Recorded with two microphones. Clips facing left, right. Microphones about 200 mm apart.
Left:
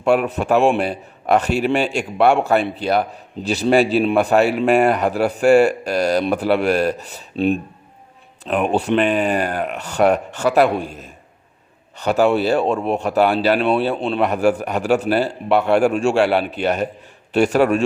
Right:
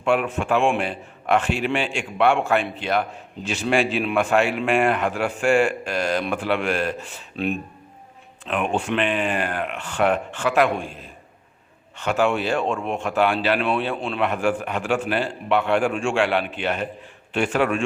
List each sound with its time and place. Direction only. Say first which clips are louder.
0.0 s a man's voice: left 4 dB; 40° left (ahead or behind)